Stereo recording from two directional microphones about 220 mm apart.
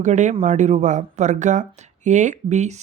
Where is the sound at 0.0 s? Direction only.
35° right (ahead or behind).